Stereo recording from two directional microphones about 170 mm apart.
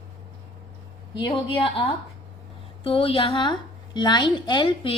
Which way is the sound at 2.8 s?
35° left (ahead or behind).